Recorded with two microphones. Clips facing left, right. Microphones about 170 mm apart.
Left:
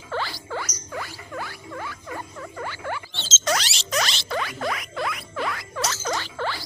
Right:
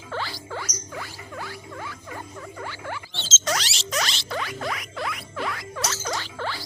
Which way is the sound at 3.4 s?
65° left (ahead or behind).